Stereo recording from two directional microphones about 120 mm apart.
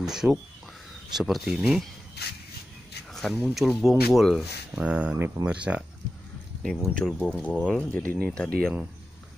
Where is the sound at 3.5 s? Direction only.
5° right (ahead or behind).